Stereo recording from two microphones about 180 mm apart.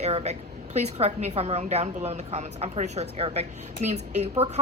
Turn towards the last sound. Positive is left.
turn(degrees=-35)  # may be behind; listen again after turning